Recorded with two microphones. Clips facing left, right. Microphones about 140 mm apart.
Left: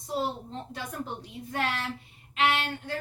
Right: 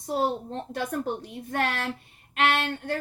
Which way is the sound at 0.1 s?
60° right (ahead or behind).